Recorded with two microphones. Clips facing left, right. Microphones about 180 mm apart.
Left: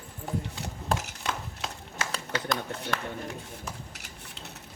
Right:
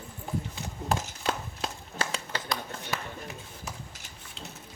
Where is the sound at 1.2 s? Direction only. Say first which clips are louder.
Right 3 dB; 30° right (ahead or behind).